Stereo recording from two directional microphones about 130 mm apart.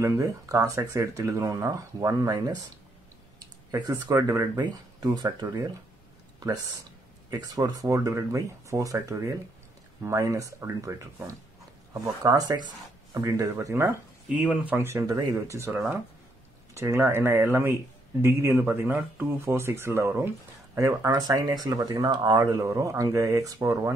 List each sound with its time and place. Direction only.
0.0 s speech: 25° right (ahead or behind)
3.7 s speech: 30° right (ahead or behind)
14.3 s speech: 10° right (ahead or behind)